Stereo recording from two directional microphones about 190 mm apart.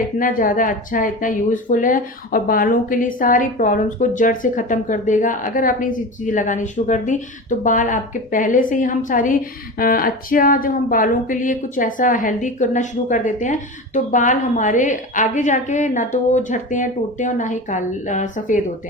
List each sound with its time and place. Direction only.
0.2 s a woman's voice: 45° left (ahead or behind)